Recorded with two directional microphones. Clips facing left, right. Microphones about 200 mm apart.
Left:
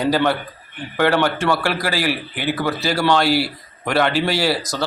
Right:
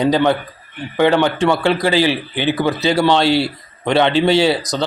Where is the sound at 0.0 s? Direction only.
20° right (ahead or behind).